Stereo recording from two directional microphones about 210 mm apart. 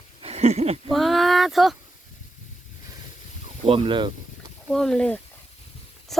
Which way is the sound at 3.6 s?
25° right (ahead or behind).